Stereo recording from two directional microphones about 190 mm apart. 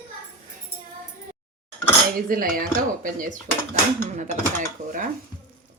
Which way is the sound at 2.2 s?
45° right (ahead or behind).